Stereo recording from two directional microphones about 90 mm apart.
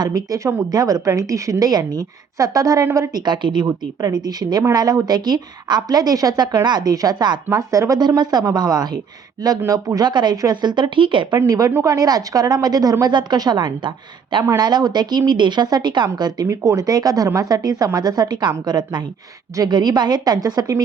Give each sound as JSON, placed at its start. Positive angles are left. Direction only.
{"t": 0.0, "sound": "speech", "side_deg": -40}
{"t": 3.2, "sound": "speech", "side_deg": -60}
{"t": 7.5, "sound": "speech", "side_deg": -40}
{"t": 7.9, "sound": "speech", "side_deg": -50}
{"t": 11.3, "sound": "speech", "side_deg": -40}